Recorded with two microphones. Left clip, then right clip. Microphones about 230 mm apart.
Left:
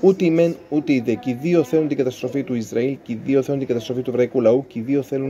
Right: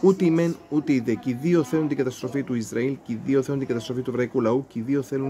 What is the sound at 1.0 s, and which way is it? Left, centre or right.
Speech, right.